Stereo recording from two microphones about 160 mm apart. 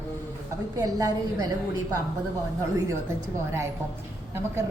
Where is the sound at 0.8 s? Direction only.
25° right (ahead or behind).